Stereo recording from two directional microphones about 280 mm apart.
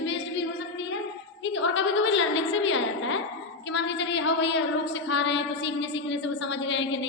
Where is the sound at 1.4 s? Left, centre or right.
Left.